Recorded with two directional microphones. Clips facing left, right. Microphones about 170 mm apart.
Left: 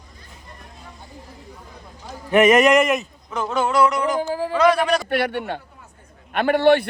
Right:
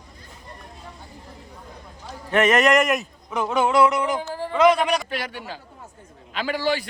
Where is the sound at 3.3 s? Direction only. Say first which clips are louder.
Right 1 dB; 10° right (ahead or behind).